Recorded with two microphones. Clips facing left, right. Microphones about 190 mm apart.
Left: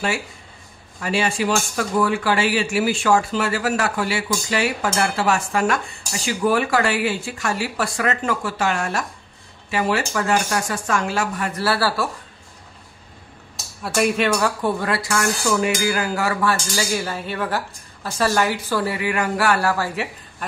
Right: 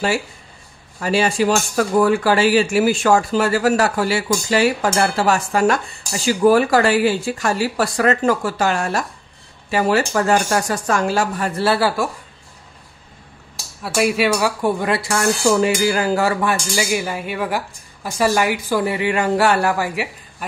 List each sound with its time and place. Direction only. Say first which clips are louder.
1.0 s speech: right 4 dB; 35° right (ahead or behind); by 12.1 s 20° right (ahead or behind)
13.8 s speech: right 2 dB; 5° right (ahead or behind); by 16.4 s 30° right (ahead or behind)
16.4 s speech: right 2 dB; 15° right (ahead or behind)